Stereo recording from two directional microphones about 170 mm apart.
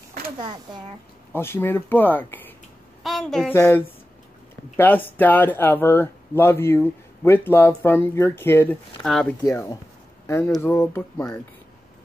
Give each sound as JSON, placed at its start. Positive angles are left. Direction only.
{"t": 1.3, "sound": "a woman's voice", "side_deg": 15}
{"t": 3.5, "sound": "speech", "side_deg": 15}
{"t": 9.0, "sound": "a woman's voice", "side_deg": 0}
{"t": 9.4, "sound": "speech", "side_deg": 20}